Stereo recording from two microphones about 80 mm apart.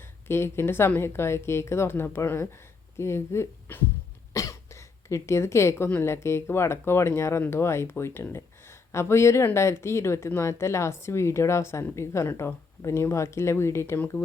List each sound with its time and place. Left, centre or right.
0.3 s speech: left
4.4 s a sound: left
5.9 s speech: left